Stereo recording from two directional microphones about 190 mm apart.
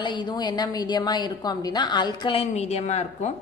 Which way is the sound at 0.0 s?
25° left (ahead or behind).